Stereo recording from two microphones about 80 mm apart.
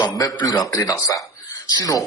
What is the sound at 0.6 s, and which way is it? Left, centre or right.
Speech, left.